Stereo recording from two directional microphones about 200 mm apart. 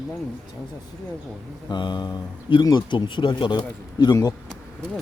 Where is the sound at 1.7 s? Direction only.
20° left (ahead or behind).